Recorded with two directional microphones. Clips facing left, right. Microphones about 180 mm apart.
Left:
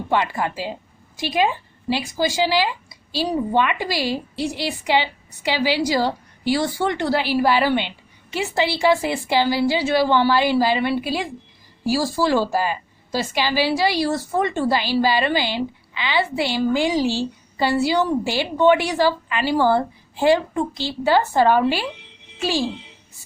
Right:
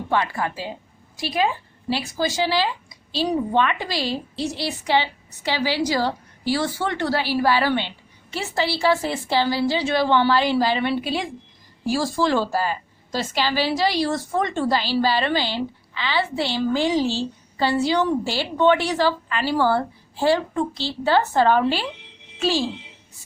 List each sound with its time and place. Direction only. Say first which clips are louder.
0.1 s a woman's voice: left 2 dB; 20° left (ahead or behind)